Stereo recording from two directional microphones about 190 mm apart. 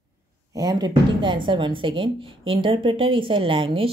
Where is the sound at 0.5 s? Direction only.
20° right (ahead or behind).